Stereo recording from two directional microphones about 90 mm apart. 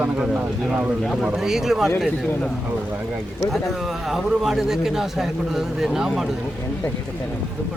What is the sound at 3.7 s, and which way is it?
A man's voice, centre (ahead or behind).